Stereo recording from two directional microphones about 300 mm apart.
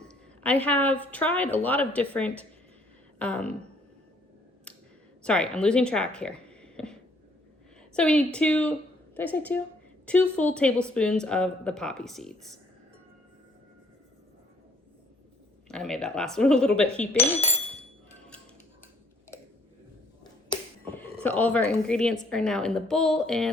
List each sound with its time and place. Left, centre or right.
0.0 s a woman's voice: centre
5.2 s speech: centre
7.9 s a woman's voice: centre
15.7 s a woman's voice: centre
20.5 s a sound: centre
22.3 s a woman's voice: centre